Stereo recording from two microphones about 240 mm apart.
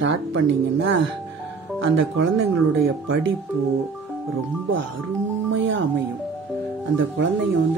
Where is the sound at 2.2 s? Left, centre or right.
Right.